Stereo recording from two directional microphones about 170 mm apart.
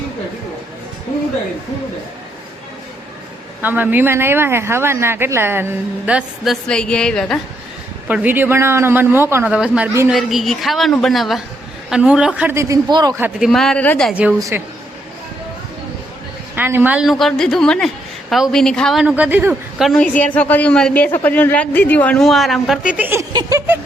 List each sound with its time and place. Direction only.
3.6 s a man's voice: 10° right (ahead or behind)
8.0 s a man's voice: 10° right (ahead or behind)
10.1 s a woman's voice: centre (ahead or behind); by 13.1 s 25° right (ahead or behind)
13.1 s a man's voice: 10° right (ahead or behind)
13.5 s a woman's voice: centre (ahead or behind)
14.1 s a man's voice: 5° right (ahead or behind)
14.3 s speech: 20° right (ahead or behind)
16.6 s a woman's voice: 10° right (ahead or behind)
19.8 s a woman's voice: 5° left (ahead or behind)
22.9 s a man's voice: 10° right (ahead or behind)
23.3 s speech: 20° right (ahead or behind)